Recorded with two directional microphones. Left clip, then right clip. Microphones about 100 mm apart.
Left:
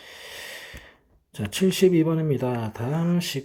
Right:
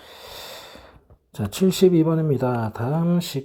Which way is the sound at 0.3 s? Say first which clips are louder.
Even; 20° right (ahead or behind).